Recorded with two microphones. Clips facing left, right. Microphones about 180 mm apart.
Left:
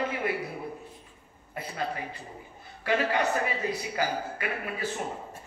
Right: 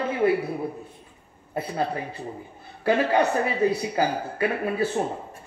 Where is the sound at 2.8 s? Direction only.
30° right (ahead or behind).